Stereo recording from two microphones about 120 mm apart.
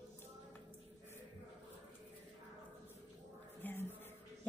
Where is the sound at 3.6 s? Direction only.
15° left (ahead or behind).